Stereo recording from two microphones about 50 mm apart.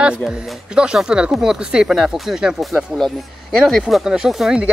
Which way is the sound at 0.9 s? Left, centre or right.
Centre.